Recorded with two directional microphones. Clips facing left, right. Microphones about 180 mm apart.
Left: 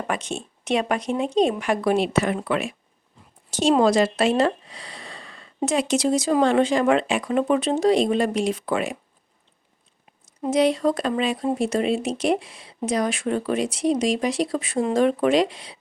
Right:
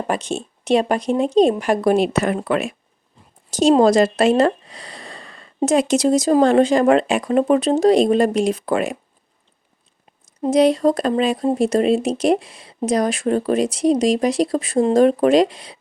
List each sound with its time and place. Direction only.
0.1 s speech: 35° right (ahead or behind)
10.4 s speech: 40° right (ahead or behind)